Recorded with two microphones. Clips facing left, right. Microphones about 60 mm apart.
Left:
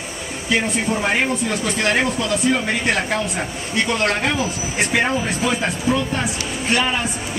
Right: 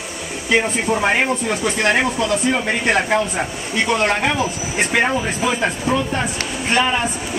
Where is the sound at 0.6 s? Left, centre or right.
Centre.